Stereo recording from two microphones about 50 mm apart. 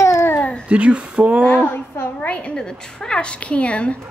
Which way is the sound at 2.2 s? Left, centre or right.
Left.